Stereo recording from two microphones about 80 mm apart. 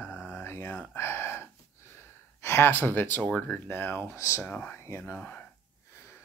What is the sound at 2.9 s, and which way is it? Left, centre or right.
Speech, left.